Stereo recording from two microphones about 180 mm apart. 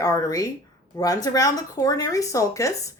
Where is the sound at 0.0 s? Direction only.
20° left (ahead or behind).